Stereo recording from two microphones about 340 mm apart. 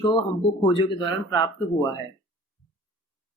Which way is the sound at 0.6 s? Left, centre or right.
Centre.